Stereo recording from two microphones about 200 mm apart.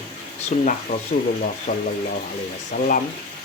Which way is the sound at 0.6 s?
40° left (ahead or behind).